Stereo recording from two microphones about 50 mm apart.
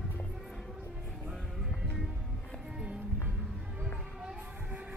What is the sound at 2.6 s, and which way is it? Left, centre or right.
Music, centre.